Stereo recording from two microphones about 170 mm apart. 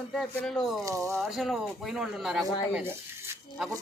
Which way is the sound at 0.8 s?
20° right (ahead or behind).